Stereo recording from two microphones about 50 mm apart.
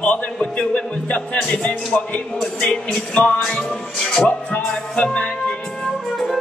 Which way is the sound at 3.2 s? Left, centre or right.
Left.